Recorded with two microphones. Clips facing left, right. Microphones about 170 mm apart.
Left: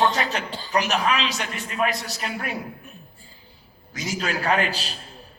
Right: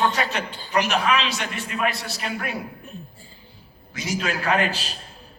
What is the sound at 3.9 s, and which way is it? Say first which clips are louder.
Speech: right 2 dB; 40° left (ahead or behind).